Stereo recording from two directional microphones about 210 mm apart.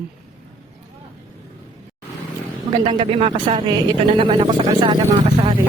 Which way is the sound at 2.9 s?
25° right (ahead or behind).